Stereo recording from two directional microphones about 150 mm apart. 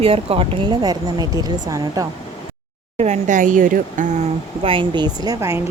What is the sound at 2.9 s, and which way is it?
Speech, 50° right (ahead or behind).